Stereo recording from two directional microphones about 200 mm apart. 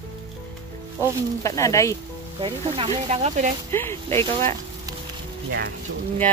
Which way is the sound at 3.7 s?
10° left (ahead or behind).